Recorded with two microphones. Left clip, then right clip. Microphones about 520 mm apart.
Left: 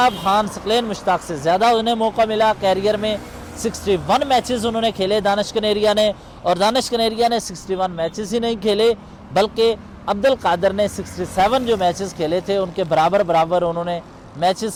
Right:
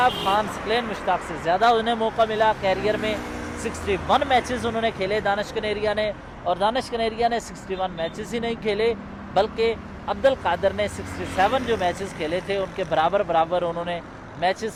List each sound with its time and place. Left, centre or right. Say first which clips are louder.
0.0 s speech: left 4 dB; left